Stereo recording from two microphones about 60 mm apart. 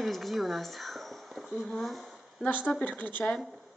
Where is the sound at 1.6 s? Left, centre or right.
Centre.